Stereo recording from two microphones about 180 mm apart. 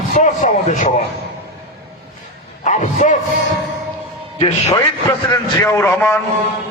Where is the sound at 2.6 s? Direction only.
45° left (ahead or behind).